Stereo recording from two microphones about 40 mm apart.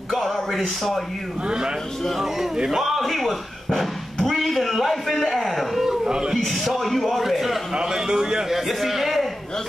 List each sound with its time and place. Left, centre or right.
0.1 s speech: centre
2.3 s a man's voice: centre
2.7 s a sound: centre
5.9 s a sound: centre
6.3 s a man's voice: centre
7.7 s a man's voice: centre
8.5 s speech: centre